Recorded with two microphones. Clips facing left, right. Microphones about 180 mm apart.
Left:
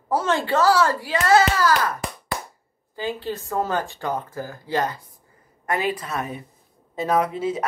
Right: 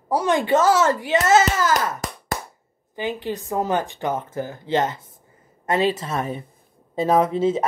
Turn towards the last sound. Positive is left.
turn(degrees=-25)  # may be behind; listen again after turning